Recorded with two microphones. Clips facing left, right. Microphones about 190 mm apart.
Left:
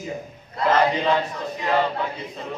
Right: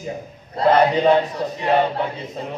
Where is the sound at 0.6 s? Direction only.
35° right (ahead or behind).